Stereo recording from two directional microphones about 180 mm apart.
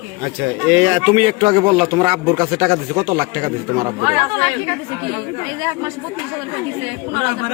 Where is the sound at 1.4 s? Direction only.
40° right (ahead or behind).